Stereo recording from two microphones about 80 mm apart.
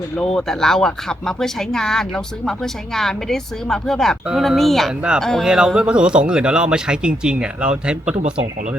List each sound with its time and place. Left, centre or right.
0.2 s speech: centre
5.5 s a man's voice: centre